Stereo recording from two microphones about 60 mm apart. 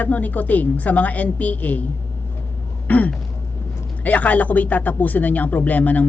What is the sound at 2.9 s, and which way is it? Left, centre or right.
Throat clearing, left.